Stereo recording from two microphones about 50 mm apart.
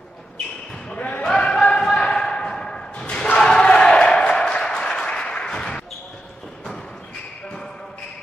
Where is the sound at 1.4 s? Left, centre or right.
Left.